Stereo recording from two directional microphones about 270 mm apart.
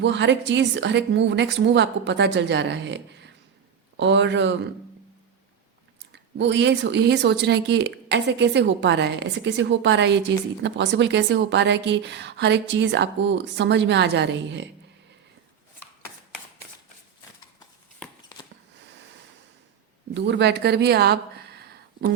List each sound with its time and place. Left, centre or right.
0.0 s a woman's voice: right
6.3 s a woman's voice: right
20.1 s speech: right